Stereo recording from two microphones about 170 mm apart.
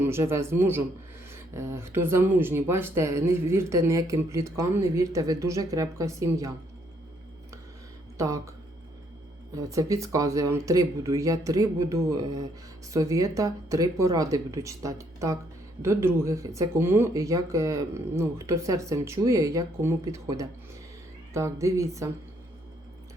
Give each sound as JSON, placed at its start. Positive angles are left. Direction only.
{"t": 0.0, "sound": "speech", "side_deg": -15}
{"t": 9.6, "sound": "speech", "side_deg": -20}